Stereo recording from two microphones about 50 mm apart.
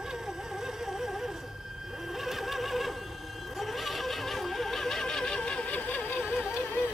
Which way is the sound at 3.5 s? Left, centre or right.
Centre.